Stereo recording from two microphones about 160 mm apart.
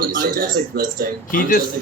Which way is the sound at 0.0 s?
65° right (ahead or behind).